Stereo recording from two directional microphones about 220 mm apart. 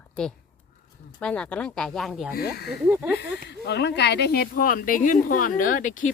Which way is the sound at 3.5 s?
50° left (ahead or behind).